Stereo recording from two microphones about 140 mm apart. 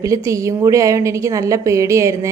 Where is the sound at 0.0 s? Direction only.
25° right (ahead or behind).